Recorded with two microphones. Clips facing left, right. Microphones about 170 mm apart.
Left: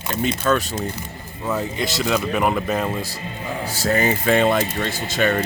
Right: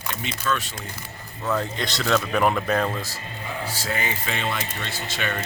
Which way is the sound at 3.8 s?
40° left (ahead or behind).